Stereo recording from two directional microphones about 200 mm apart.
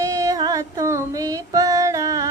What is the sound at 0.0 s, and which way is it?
Female singing, 15° right (ahead or behind).